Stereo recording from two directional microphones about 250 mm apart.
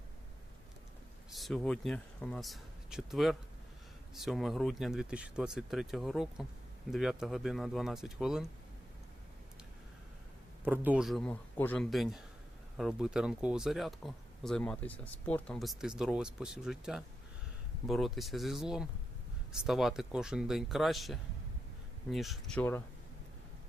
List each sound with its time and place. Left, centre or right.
1.3 s speech: centre
10.7 s speech: centre